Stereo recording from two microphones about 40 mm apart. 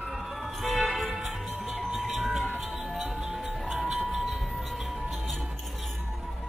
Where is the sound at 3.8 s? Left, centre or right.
Right.